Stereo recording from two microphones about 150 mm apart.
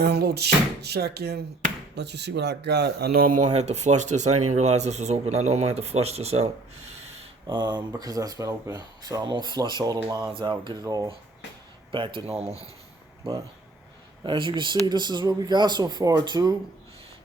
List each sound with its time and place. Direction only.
0.0 s speech: 90° right; by 6.5 s 45° right (ahead or behind)
7.4 s speech: 30° right (ahead or behind)
11.9 s speech: 35° right (ahead or behind)
14.3 s speech: 35° right (ahead or behind)